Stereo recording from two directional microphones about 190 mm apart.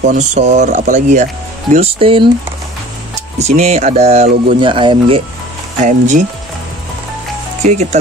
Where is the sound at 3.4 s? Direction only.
35° right (ahead or behind).